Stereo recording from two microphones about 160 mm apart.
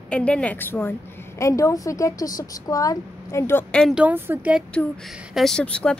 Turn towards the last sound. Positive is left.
turn(degrees=5)  # may be behind; listen again after turning